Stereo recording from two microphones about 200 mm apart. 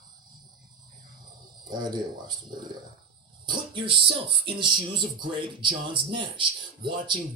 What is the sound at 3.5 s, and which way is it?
Speech, 25° right (ahead or behind).